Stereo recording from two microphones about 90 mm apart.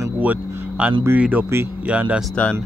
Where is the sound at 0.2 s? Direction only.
15° right (ahead or behind).